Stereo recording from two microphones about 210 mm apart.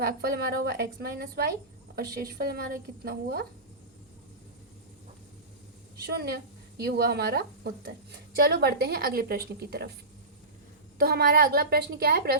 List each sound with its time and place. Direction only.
0.0 s speech: 45° right (ahead or behind)
6.1 s speech: 45° right (ahead or behind)
10.9 s speech: 45° right (ahead or behind)